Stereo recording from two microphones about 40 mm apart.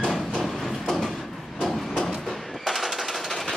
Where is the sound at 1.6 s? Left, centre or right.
Centre.